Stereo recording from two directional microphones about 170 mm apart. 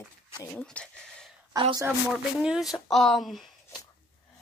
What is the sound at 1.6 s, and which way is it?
Speech, 25° right (ahead or behind).